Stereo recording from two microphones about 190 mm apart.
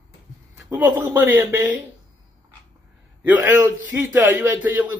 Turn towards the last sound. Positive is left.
turn(degrees=-10)  # may be behind; listen again after turning